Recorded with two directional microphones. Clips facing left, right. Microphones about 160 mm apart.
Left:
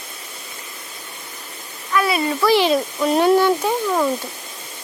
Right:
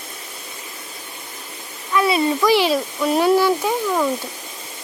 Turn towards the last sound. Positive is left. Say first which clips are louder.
# left 1 dB
turn(degrees=5)  # may be behind; listen again after turning